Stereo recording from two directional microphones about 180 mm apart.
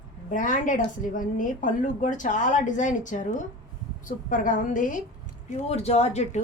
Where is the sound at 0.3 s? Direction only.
45° left (ahead or behind).